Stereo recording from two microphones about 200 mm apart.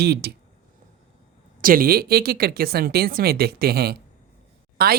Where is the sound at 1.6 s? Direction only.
45° right (ahead or behind).